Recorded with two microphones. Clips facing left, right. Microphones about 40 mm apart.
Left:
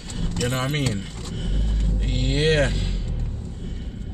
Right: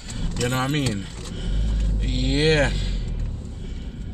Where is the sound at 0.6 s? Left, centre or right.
Centre.